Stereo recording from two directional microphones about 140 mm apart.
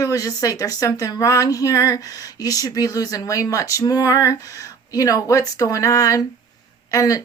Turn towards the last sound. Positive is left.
turn(degrees=25)  # may be behind; listen again after turning